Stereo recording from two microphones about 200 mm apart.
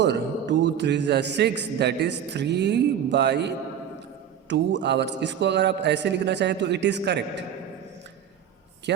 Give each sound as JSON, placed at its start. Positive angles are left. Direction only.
{"t": 0.0, "sound": "a man's voice", "side_deg": -60}